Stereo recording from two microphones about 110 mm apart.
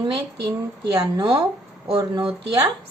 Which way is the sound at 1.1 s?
45° right (ahead or behind).